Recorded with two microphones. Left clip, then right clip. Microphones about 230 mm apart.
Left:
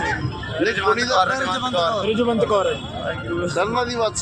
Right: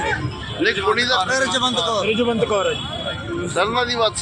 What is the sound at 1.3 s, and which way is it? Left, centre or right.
Speech, right.